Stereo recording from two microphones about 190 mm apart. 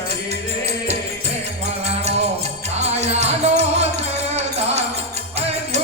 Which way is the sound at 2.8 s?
35° right (ahead or behind).